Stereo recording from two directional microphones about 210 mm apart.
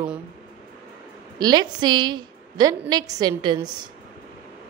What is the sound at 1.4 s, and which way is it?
A woman's voice, 20° right (ahead or behind).